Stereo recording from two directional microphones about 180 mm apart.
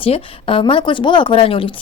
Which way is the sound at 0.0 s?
30° left (ahead or behind).